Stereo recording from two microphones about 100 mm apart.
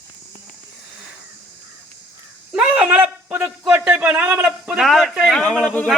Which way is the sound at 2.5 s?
10° right (ahead or behind).